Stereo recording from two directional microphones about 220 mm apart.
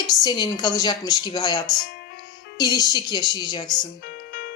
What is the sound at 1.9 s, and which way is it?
Music, 45° left (ahead or behind).